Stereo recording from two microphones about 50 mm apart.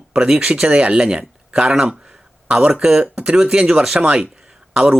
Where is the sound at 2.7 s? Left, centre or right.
Centre.